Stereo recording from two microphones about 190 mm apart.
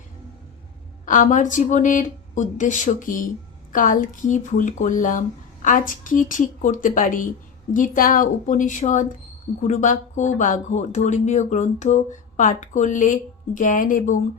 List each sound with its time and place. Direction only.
1.0 s speech: 45° left (ahead or behind)